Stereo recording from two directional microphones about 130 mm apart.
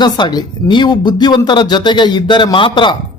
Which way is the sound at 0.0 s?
35° left (ahead or behind).